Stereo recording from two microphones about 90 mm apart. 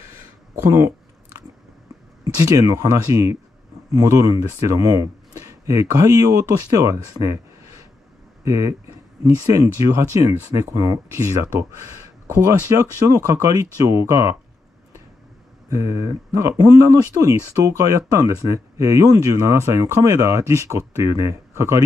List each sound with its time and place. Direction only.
0.6 s speech: 30° right (ahead or behind)
2.2 s speech: 35° right (ahead or behind)
12.4 s speech: 40° right (ahead or behind)
15.7 s speech: 35° right (ahead or behind)